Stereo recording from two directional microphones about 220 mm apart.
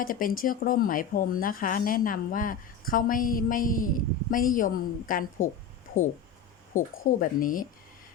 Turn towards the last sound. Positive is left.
turn(degrees=40)  # may be behind; listen again after turning